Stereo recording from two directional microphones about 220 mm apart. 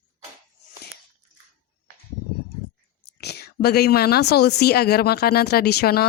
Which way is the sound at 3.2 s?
45° left (ahead or behind).